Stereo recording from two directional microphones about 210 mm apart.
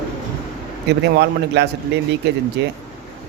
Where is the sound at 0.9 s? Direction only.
55° right (ahead or behind).